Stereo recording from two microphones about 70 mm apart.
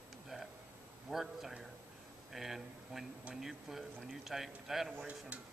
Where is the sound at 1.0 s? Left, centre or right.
Centre.